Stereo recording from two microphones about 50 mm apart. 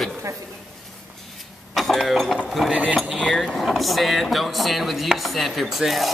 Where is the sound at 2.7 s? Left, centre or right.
Right.